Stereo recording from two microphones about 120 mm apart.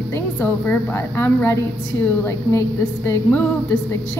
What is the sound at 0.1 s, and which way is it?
A woman's voice, 20° left (ahead or behind).